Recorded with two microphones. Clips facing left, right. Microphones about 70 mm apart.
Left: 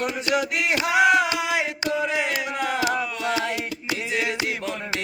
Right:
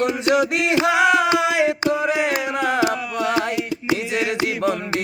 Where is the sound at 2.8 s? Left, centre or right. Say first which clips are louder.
Right 4 dB; right.